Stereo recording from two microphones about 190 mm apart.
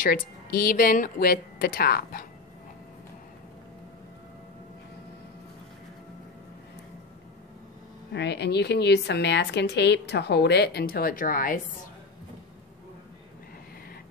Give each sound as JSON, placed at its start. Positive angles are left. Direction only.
{"t": 0.0, "sound": "speech", "side_deg": 50}
{"t": 8.1, "sound": "a woman's voice", "side_deg": 65}